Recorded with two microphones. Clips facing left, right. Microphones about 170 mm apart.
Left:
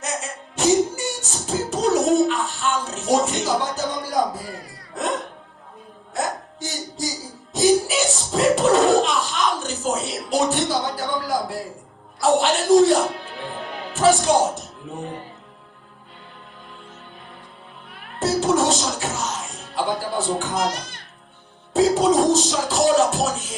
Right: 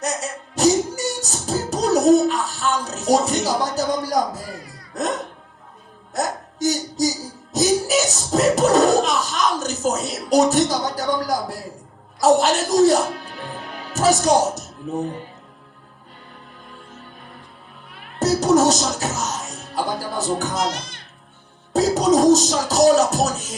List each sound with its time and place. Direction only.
0.0 s music: 40° right (ahead or behind)
6.1 s a sound: 40° right (ahead or behind)
12.2 s music: 40° right (ahead or behind)
18.2 s music: 40° right (ahead or behind)
21.7 s music: 40° right (ahead or behind)